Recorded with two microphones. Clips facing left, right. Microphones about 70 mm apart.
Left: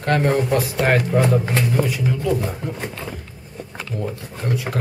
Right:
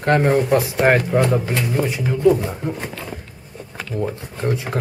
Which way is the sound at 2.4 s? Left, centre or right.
Centre.